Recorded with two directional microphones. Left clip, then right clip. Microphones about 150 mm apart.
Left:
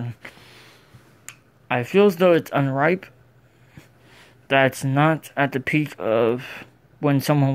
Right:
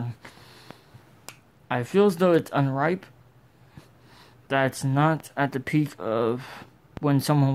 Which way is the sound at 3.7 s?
Centre (ahead or behind).